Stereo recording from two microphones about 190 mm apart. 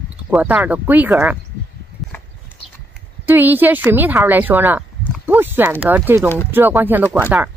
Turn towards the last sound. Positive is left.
turn(degrees=-10)  # may be behind; listen again after turning